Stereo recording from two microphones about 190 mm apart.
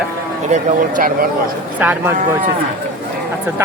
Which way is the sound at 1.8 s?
10° right (ahead or behind).